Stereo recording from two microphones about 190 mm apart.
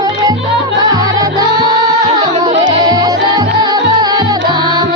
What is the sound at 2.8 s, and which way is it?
Music, 20° right (ahead or behind).